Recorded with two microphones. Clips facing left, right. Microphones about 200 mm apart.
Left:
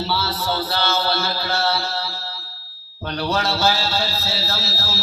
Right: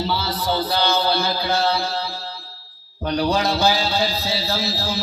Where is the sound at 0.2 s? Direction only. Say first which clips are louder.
Right 1 dB; 15° right (ahead or behind).